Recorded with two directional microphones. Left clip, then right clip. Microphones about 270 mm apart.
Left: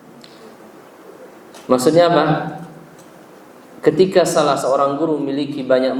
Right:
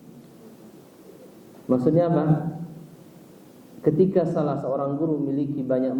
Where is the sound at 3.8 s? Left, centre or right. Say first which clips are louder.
Left 8 dB; centre.